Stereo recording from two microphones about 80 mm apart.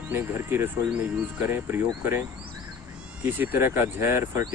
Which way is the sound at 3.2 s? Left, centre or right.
Right.